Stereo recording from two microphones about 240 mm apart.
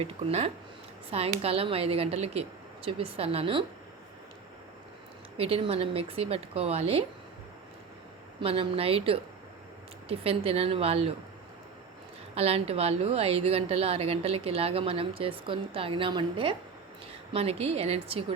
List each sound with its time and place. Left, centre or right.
0.0 s a woman's voice: right
5.4 s a woman's voice: right
8.4 s a woman's voice: right
12.3 s a woman's voice: right